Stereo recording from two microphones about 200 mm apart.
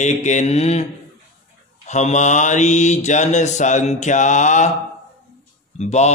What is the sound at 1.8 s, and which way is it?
Mantra, 35° left (ahead or behind).